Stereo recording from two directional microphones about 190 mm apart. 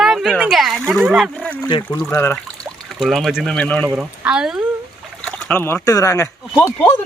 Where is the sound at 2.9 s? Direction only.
Centre (ahead or behind).